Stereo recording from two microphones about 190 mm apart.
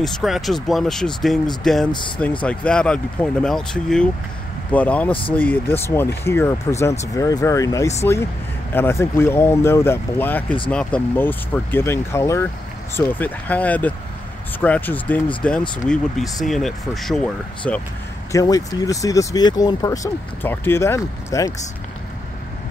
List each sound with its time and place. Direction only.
0.0 s speech: centre (ahead or behind)
1.9 s speech: 25° left (ahead or behind)
2.4 s speech: 5° left (ahead or behind)
18.3 s speech: 20° left (ahead or behind)